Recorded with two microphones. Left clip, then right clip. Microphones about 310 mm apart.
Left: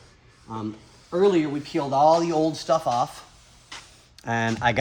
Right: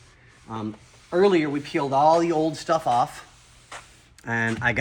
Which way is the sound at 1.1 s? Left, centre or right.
Centre.